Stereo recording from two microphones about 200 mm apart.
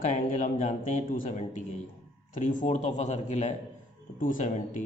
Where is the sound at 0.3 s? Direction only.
40° left (ahead or behind).